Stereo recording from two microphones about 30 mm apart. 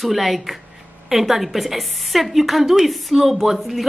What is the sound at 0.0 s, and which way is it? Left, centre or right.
A woman's voice, centre.